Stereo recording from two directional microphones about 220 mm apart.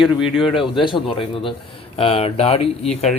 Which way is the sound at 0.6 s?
20° left (ahead or behind).